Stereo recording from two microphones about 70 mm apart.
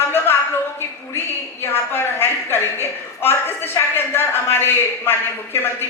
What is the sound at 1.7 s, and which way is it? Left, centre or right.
A woman's voice, left.